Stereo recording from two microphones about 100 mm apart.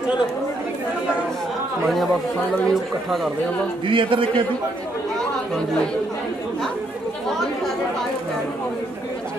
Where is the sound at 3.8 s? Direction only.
60° right (ahead or behind).